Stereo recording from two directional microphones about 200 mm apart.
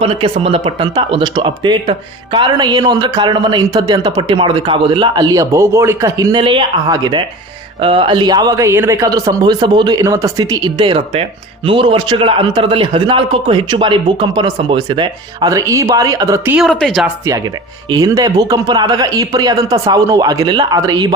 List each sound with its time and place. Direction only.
0.0 s speech: 30° right (ahead or behind)
16.6 s speech: centre (ahead or behind)
17.8 s speech: 15° right (ahead or behind)